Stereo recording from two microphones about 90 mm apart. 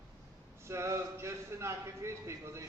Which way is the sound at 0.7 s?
30° right (ahead or behind).